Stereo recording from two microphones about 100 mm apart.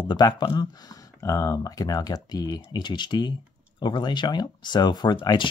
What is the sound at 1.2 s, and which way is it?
Speech, 30° left (ahead or behind).